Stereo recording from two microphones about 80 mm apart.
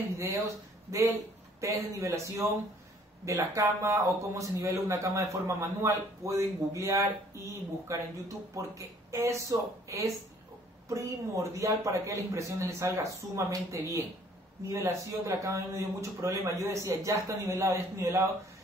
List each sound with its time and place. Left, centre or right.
0.2 s speech: right